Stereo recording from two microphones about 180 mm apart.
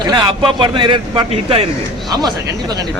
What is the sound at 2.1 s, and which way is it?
Speech, 20° right (ahead or behind).